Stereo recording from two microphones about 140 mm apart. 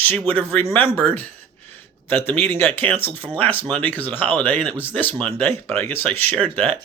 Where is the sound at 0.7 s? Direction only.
10° left (ahead or behind).